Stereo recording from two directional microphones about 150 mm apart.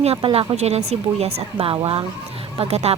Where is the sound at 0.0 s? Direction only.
40° right (ahead or behind).